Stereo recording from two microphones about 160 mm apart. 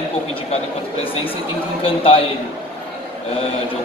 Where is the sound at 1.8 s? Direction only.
35° left (ahead or behind).